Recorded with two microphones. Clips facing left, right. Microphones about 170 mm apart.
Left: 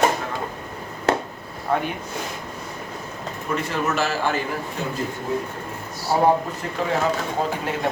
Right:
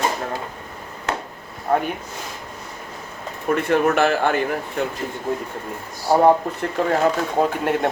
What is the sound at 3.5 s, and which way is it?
A man's voice, 55° right (ahead or behind).